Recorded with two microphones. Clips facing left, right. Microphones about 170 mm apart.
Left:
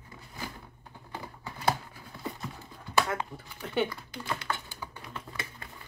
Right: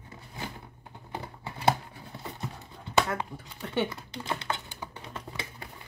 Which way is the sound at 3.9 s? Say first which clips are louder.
Right 1 dB; 25° right (ahead or behind).